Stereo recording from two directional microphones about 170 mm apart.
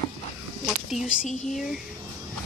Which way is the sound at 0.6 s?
5° right (ahead or behind).